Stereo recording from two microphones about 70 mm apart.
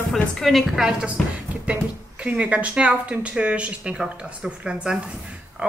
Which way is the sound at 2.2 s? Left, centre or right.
Centre.